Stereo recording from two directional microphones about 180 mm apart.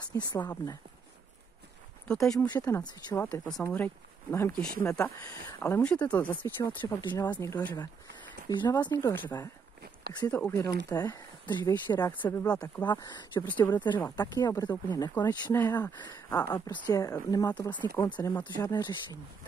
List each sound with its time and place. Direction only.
0.1 s speech: 20° left (ahead or behind)
2.0 s speech: 5° left (ahead or behind)
2.4 s speech: 20° left (ahead or behind)
7.3 s speech: 10° left (ahead or behind)
10.3 s speech: 15° left (ahead or behind)
13.5 s speech: 10° left (ahead or behind)
13.7 s speech: 25° left (ahead or behind)
16.3 s speech: 10° left (ahead or behind)
18.1 s speech: 10° left (ahead or behind)
18.6 s speech: 20° left (ahead or behind)